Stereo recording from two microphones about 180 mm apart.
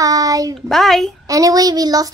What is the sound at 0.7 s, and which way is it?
Speech, centre (ahead or behind).